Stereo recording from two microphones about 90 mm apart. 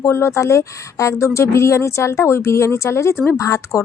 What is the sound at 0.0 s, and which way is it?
A woman's voice, 30° left (ahead or behind).